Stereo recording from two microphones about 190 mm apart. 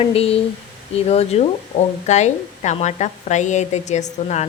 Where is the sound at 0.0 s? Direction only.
30° left (ahead or behind).